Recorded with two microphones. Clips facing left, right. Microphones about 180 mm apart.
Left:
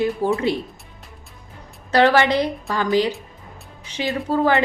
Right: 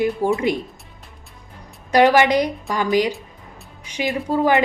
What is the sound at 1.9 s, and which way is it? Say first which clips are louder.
A woman's voice: right 2 dB; 15° right (ahead or behind).